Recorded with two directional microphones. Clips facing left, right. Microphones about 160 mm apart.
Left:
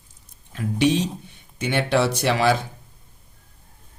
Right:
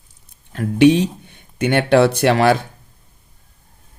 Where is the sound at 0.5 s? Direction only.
55° right (ahead or behind).